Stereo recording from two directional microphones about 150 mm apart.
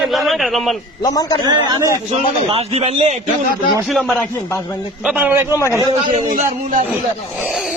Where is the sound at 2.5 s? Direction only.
40° right (ahead or behind).